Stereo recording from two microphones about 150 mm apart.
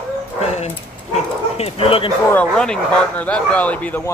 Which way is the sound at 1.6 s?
40° left (ahead or behind).